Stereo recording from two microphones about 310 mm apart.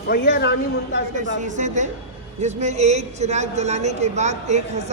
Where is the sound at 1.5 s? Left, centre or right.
Right.